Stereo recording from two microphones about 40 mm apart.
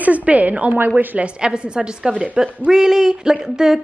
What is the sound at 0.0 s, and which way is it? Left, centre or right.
A woman's voice, right.